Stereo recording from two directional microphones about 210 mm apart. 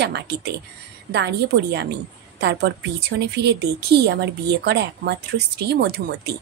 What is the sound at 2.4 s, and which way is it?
Speech, 55° right (ahead or behind).